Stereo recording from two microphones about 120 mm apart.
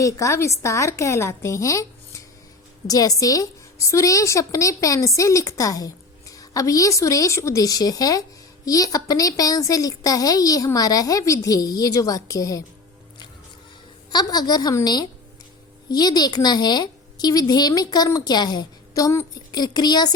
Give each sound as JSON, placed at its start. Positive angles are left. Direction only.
{"t": 0.0, "sound": "a woman's voice", "side_deg": 25}
{"t": 14.1, "sound": "a woman's voice", "side_deg": 35}